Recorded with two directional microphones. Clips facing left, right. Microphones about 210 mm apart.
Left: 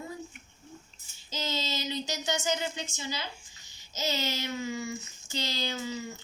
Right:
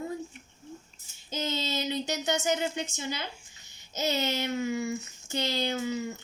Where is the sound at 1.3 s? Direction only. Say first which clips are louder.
Right 3 dB; 55° right (ahead or behind).